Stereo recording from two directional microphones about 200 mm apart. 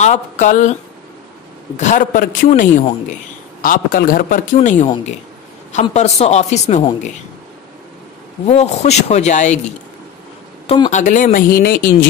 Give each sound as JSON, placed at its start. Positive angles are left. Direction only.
{"t": 0.0, "sound": "a woman's voice", "side_deg": 35}
{"t": 1.8, "sound": "a woman's voice", "side_deg": 40}
{"t": 8.5, "sound": "a woman's voice", "side_deg": 30}
{"t": 10.7, "sound": "a woman's voice", "side_deg": 35}